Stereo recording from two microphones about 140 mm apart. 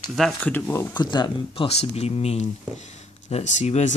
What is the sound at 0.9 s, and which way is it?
Speech, 30° left (ahead or behind).